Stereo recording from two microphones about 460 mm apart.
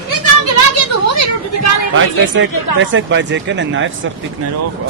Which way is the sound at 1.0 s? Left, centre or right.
Left.